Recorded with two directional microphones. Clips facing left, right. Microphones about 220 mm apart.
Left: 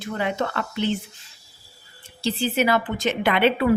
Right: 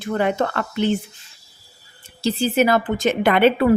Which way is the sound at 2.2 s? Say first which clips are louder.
Right 4 dB; 45° right (ahead or behind).